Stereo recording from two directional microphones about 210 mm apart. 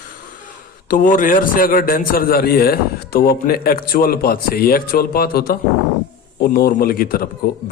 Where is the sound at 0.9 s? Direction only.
40° left (ahead or behind).